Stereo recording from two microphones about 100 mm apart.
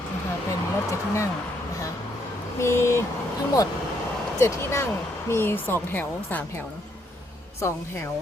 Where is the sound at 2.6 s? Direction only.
30° left (ahead or behind).